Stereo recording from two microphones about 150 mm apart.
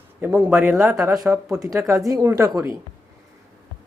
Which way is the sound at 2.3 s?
20° right (ahead or behind).